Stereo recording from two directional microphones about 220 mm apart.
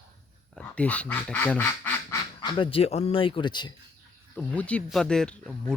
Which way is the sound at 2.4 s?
20° left (ahead or behind).